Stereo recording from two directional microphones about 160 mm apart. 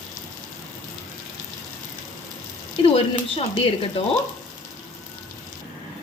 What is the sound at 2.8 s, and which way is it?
Speech, 35° left (ahead or behind).